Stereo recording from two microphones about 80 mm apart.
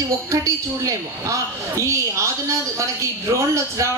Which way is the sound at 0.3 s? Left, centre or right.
Right.